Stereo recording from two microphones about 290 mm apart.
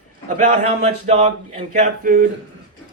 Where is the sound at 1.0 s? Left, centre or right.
Right.